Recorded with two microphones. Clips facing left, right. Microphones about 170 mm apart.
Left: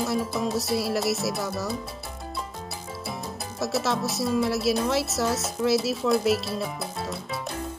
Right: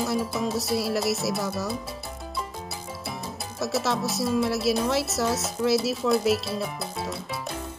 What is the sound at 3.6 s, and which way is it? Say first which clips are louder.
Speech: even; centre (ahead or behind).